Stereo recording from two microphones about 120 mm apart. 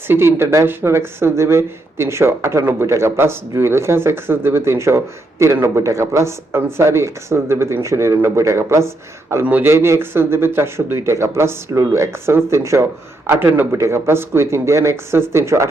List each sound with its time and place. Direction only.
0.1 s speech: 20° right (ahead or behind)